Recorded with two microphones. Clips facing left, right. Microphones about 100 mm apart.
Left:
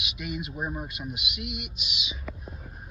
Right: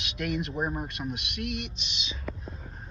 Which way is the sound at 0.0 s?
10° left (ahead or behind).